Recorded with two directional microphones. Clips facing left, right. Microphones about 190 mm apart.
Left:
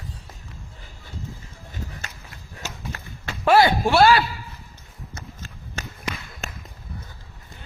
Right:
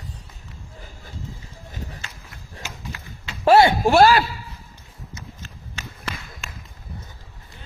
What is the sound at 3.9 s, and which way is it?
Speech, 40° right (ahead or behind).